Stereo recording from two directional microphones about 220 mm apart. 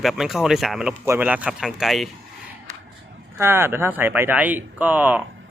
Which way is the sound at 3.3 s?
10° right (ahead or behind).